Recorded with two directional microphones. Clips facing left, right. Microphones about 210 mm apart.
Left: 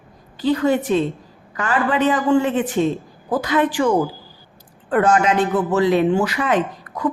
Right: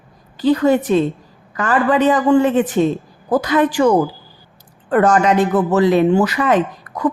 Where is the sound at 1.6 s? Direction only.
40° right (ahead or behind).